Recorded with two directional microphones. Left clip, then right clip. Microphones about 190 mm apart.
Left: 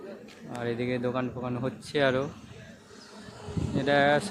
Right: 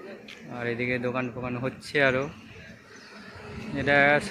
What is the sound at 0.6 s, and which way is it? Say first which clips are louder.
Speech: right 2 dB; 5° left (ahead or behind).